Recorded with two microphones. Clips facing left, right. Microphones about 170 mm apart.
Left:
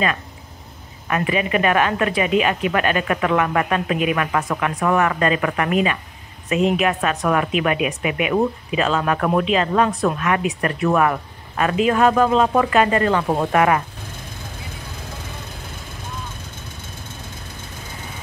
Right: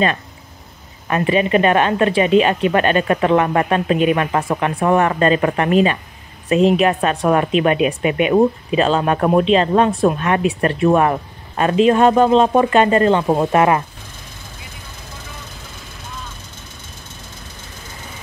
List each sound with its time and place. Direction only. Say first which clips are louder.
1.0 s a woman's voice: right 4 dB; 30° right (ahead or behind)